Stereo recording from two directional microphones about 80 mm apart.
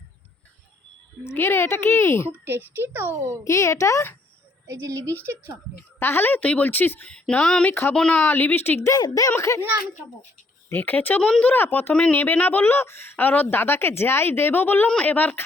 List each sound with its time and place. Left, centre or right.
1.2 s speech: left
2.4 s a child's voice: right
3.4 s speech: left
4.6 s a child's voice: right
6.0 s speech: left
7.1 s a sound: centre
7.7 s speech: left
7.9 s a sound: centre
8.2 s speech: left
9.3 s speech: left
9.6 s a child's voice: right
10.7 s speech: left
11.2 s a sound: centre
11.5 s speech: left